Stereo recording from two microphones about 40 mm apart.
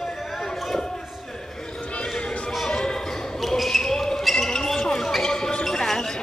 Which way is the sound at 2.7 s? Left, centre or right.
Centre.